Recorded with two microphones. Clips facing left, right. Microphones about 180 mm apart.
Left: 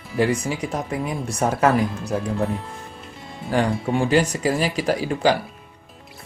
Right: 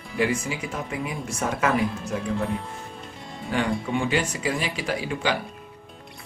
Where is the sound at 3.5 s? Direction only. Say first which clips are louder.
Left 4 dB; 40° left (ahead or behind).